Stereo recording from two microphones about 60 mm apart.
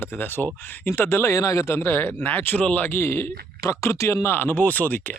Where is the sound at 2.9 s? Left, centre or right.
Left.